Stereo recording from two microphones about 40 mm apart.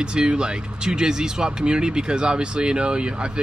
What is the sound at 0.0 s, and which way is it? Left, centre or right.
Speech, right.